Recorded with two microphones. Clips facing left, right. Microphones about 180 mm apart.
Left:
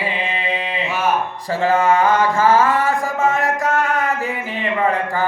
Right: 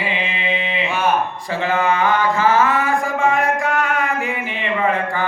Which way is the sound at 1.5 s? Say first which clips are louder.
Left 4 dB; 40° left (ahead or behind).